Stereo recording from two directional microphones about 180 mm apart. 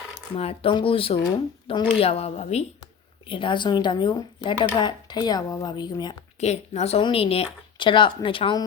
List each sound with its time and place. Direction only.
0.3 s a woman's voice: 35° left (ahead or behind)
6.4 s a woman's voice: 40° left (ahead or behind)